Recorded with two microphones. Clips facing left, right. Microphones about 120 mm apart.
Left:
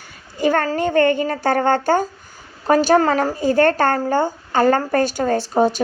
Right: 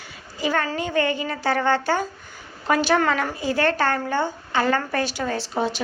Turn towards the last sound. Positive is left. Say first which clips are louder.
# left 8 dB
turn(degrees=45)  # may be behind; listen again after turning